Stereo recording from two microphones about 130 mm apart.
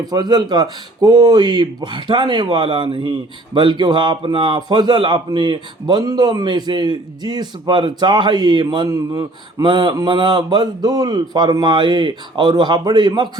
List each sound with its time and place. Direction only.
0.0 s a man's voice: 30° right (ahead or behind)